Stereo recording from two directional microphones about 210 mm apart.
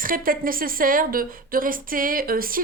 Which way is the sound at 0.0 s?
40° right (ahead or behind).